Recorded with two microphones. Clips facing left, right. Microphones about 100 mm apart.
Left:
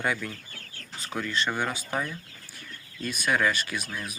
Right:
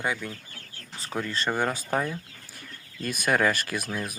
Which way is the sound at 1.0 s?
35° right (ahead or behind).